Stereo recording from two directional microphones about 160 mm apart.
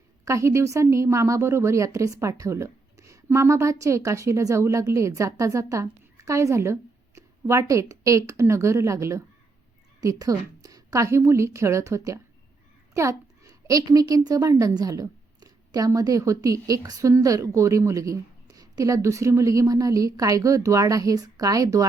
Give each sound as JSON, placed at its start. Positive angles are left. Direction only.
{"t": 0.3, "sound": "a woman's voice", "side_deg": -20}